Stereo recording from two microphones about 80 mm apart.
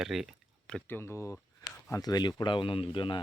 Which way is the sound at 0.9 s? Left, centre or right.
Left.